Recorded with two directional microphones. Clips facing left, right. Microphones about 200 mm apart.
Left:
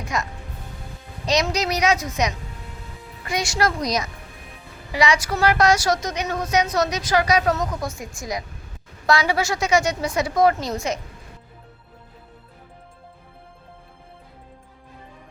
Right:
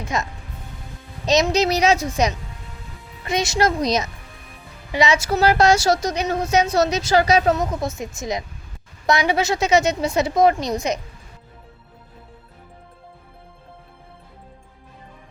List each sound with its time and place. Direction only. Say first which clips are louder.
0.1 s a woman's voice: right 2 dB; 25° right (ahead or behind)
1.3 s a woman's voice: right 4 dB; 25° right (ahead or behind)